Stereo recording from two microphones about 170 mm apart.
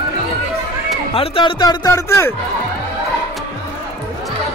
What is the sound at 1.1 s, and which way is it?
Speech, 30° left (ahead or behind).